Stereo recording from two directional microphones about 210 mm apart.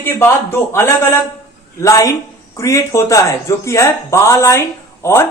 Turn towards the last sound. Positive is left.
turn(degrees=10)  # may be behind; listen again after turning